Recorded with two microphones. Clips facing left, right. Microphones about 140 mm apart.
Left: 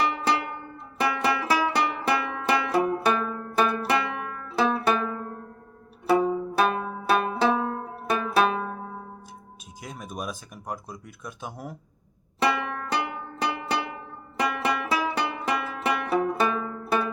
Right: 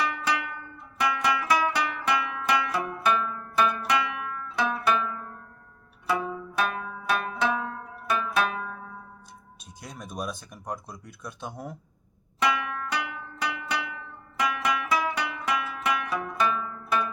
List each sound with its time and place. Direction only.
0.0 s music: 30° left (ahead or behind)
9.8 s speech: 5° left (ahead or behind)
12.4 s music: 30° left (ahead or behind)